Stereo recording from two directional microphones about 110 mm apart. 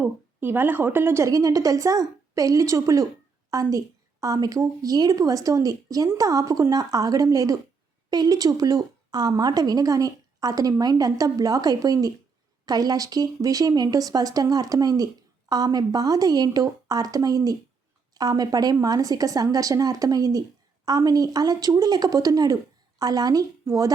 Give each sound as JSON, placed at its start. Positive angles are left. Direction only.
{"t": 0.0, "sound": "a woman's voice", "side_deg": -20}